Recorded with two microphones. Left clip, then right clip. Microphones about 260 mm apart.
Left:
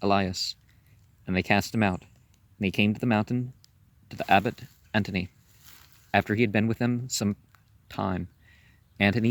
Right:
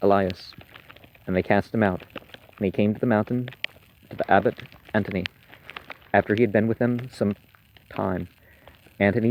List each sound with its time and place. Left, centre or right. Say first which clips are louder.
0.0 s speech: right 4 dB; left